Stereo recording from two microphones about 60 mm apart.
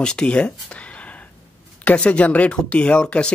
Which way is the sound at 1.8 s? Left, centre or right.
Left.